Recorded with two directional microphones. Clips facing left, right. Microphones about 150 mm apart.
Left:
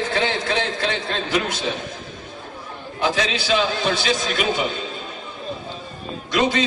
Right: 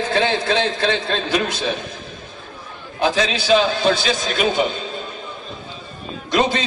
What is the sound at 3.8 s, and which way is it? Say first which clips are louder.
Speech: right 3 dB; 30° right (ahead or behind).